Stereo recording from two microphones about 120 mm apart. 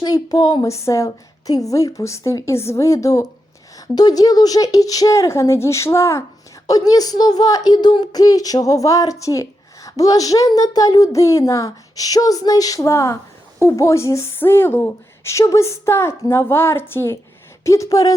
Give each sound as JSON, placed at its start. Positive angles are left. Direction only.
{"t": 0.0, "sound": "a woman's voice", "side_deg": 35}